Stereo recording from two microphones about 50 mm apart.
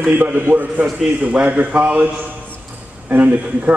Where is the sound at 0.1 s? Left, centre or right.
Right.